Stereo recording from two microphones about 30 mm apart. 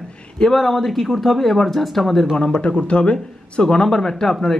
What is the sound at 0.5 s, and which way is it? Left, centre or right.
Speech, centre.